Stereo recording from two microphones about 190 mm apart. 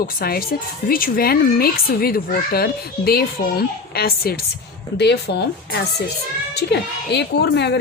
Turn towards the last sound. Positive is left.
turn(degrees=60)  # may be behind; listen again after turning